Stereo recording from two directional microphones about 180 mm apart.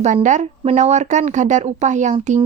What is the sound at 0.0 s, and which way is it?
Speech, 45° right (ahead or behind).